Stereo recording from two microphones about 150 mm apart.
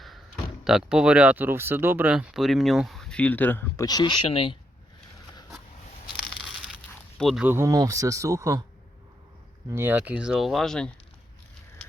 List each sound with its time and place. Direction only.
0.6 s speech: 5° right (ahead or behind); by 3.8 s 15° left (ahead or behind)
3.8 s speech: 30° left (ahead or behind)
7.2 s speech: centre (ahead or behind)
7.4 s speech: 15° right (ahead or behind)
9.7 s speech: 15° right (ahead or behind); by 10.9 s 5° left (ahead or behind)